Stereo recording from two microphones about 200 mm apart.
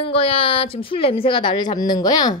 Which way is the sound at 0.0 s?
30° left (ahead or behind).